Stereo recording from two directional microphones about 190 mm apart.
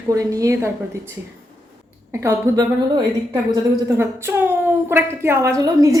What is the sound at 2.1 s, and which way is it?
A woman's voice, 15° right (ahead or behind).